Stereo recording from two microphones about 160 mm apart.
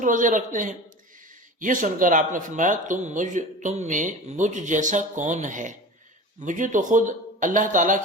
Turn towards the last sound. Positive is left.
turn(degrees=-55)  # may be behind; listen again after turning